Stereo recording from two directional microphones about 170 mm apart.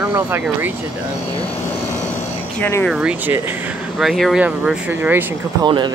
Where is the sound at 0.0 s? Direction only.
10° right (ahead or behind).